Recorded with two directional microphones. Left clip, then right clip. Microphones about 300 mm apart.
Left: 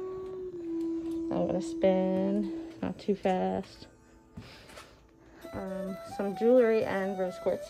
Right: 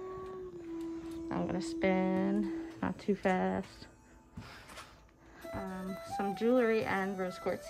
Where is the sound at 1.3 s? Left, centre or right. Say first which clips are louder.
Left 5 dB; centre.